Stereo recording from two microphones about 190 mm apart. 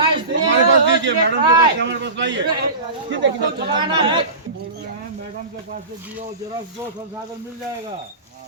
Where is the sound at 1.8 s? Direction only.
70° right (ahead or behind).